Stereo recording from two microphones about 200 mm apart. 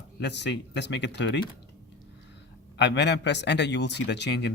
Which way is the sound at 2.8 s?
60° left (ahead or behind).